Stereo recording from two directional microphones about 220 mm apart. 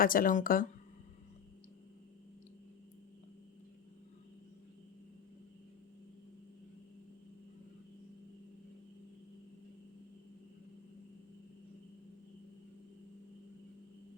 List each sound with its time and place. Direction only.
0.0 s speech: 40° left (ahead or behind)